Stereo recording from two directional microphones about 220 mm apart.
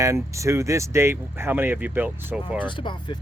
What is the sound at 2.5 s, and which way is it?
Speech, 20° left (ahead or behind).